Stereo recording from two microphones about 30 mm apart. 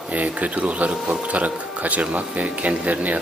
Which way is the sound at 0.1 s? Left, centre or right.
Right.